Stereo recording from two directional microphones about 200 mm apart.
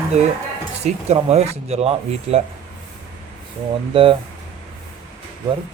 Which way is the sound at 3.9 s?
25° right (ahead or behind).